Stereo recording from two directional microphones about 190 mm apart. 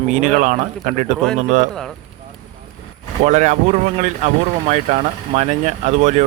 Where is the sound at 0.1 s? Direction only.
45° right (ahead or behind).